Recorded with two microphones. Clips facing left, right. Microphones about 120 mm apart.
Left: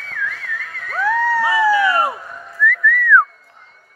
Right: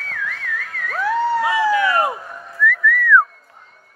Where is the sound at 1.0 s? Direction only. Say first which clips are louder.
Left 1 dB; 30° right (ahead or behind).